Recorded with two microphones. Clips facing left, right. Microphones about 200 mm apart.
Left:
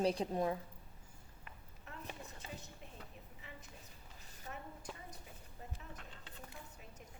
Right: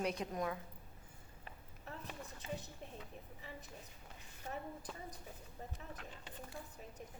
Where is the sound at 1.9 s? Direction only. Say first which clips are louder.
Right 3 dB; 35° right (ahead or behind).